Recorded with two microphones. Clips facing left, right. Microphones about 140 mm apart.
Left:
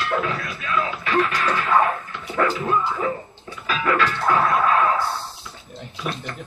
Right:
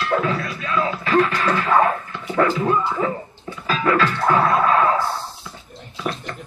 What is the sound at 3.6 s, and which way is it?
Music, 30° right (ahead or behind).